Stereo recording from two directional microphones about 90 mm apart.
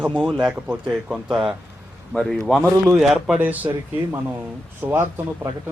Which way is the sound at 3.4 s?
20° right (ahead or behind).